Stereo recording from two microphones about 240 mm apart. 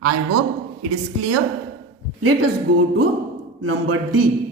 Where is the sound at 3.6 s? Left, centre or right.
Right.